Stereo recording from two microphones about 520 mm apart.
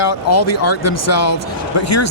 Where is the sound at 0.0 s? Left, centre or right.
Left.